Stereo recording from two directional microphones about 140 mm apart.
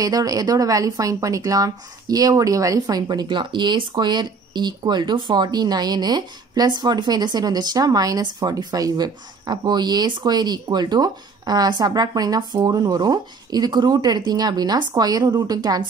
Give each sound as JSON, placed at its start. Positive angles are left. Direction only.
{"t": 0.0, "sound": "a woman's voice", "side_deg": -25}